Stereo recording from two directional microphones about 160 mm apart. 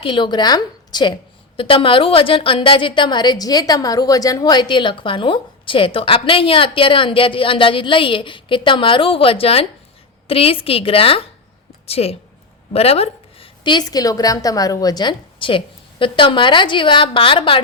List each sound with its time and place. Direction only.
0.0 s a woman's voice: 30° left (ahead or behind)